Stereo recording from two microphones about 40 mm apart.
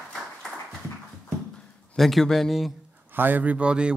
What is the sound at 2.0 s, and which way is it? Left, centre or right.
Speech, centre.